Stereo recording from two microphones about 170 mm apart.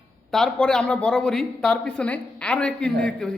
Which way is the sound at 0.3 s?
5° left (ahead or behind).